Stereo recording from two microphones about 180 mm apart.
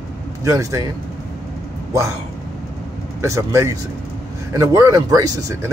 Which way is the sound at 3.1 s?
15° right (ahead or behind).